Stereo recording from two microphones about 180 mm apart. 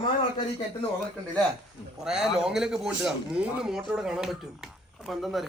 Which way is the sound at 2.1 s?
5° right (ahead or behind).